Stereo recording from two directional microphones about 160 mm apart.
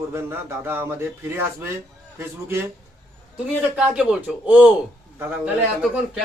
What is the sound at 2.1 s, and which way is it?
A man's voice, 15° right (ahead or behind).